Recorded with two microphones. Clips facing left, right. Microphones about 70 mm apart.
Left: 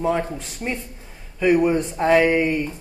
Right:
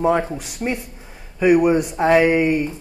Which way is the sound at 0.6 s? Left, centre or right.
Centre.